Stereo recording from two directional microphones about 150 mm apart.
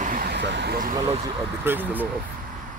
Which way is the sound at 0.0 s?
75° right (ahead or behind).